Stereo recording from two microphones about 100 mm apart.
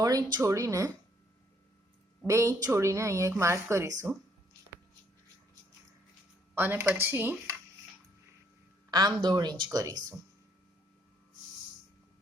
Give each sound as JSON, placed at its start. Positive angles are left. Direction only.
{"t": 0.0, "sound": "speech", "side_deg": -35}
{"t": 2.2, "sound": "a woman's voice", "side_deg": -30}
{"t": 6.6, "sound": "a woman's voice", "side_deg": -20}
{"t": 8.9, "sound": "speech", "side_deg": -45}
{"t": 9.7, "sound": "speech", "side_deg": -35}